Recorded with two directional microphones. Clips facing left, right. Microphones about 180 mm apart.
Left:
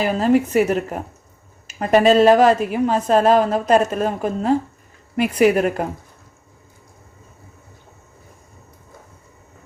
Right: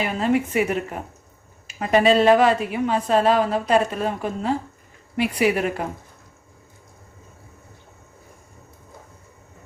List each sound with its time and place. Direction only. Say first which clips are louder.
0.0 s a woman's voice: left 5 dB; 35° left (ahead or behind)